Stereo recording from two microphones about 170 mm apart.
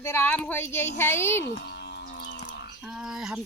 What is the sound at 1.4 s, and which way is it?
Moo, 80° left.